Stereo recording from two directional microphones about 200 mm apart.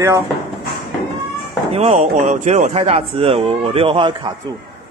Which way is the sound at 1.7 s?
30° right (ahead or behind).